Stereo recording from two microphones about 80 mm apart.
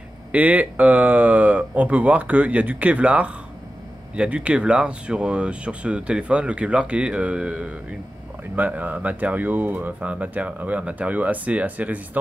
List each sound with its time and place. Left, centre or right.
0.3 s speech: centre